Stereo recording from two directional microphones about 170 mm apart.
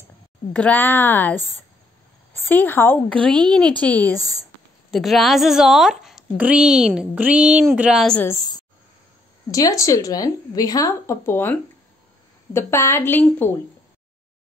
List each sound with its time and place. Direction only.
0.5 s a woman's voice: 10° left (ahead or behind)
8.2 s a woman's voice: 20° left (ahead or behind)
12.5 s a woman's voice: 15° left (ahead or behind)